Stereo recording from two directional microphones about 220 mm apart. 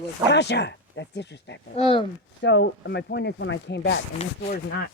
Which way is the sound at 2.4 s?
50° left (ahead or behind).